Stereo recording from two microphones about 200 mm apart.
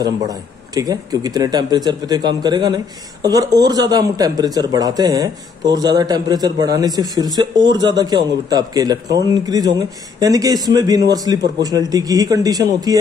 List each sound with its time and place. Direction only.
0.0 s a man's voice: 20° right (ahead or behind)